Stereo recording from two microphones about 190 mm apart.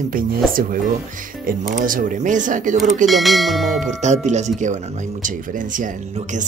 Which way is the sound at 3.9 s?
40° right (ahead or behind).